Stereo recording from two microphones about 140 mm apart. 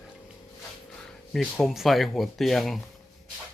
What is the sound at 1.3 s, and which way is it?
Speech, centre (ahead or behind).